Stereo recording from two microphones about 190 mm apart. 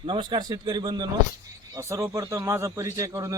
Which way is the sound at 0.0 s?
25° right (ahead or behind).